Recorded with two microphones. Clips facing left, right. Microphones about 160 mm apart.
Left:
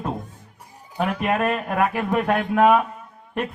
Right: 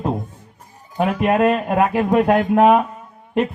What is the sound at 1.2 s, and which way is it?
Speech, 25° right (ahead or behind).